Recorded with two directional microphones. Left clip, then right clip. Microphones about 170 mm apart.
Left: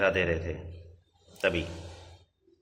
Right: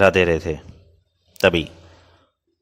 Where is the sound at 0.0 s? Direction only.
55° right (ahead or behind).